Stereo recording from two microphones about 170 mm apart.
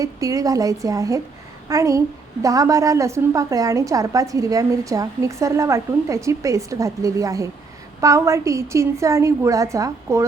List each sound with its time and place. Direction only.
0.0 s a woman's voice: 20° right (ahead or behind)